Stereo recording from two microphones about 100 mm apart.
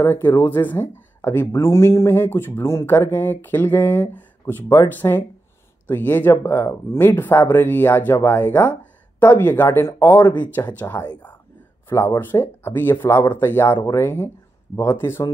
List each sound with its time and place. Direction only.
0.0 s speech: 20° left (ahead or behind)